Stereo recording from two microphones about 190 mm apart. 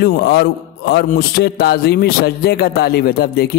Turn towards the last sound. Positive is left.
turn(degrees=55)  # may be behind; listen again after turning